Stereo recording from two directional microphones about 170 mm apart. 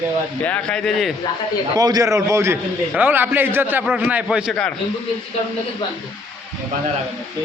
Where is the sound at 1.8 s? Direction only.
20° right (ahead or behind).